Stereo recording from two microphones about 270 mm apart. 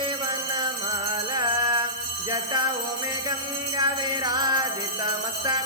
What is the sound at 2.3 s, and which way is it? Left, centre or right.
Jingle bell, centre.